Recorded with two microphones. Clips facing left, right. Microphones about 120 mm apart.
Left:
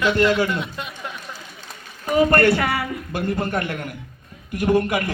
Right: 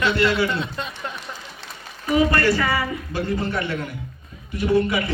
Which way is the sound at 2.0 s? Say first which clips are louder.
Left 2 dB; 50° left (ahead or behind).